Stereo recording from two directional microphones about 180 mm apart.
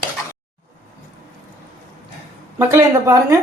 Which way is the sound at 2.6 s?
15° right (ahead or behind).